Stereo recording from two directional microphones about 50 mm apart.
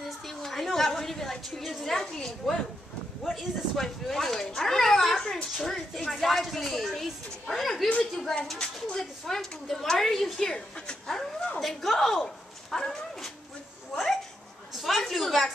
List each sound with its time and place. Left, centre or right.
0.3 s a woman's voice: centre
8.5 s a woman's voice: centre
9.2 s a woman's voice: centre
11.6 s speech: centre
13.9 s a sound: centre
14.8 s a woman's voice: centre